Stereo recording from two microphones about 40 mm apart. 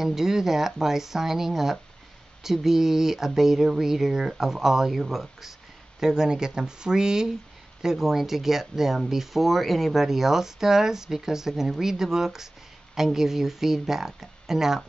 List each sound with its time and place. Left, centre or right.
0.0 s speech: centre